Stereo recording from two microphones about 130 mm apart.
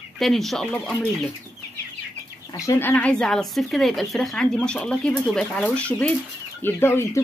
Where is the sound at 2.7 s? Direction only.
15° left (ahead or behind).